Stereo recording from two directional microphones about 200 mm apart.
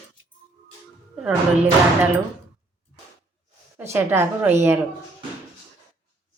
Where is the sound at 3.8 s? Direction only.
10° right (ahead or behind).